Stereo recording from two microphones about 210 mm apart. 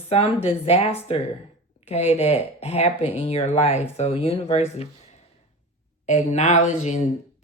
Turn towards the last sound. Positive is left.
turn(degrees=35)  # may be behind; listen again after turning